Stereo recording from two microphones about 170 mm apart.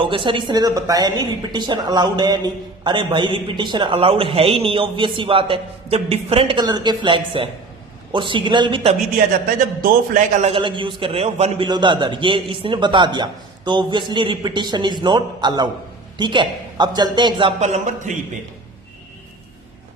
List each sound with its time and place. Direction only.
0.0 s speech: 30° right (ahead or behind)
10.3 s speech: 40° right (ahead or behind)
10.6 s speech: 30° right (ahead or behind)
17.6 s speech: 40° right (ahead or behind)